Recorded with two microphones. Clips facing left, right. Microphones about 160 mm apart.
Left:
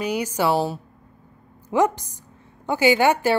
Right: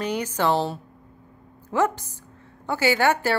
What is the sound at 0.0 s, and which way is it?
Speech, 10° left (ahead or behind).